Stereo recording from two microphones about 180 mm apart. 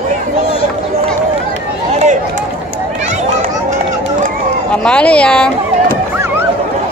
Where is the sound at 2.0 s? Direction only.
40° right (ahead or behind).